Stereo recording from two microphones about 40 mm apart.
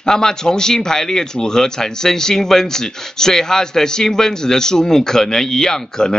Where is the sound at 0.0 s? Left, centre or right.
Centre.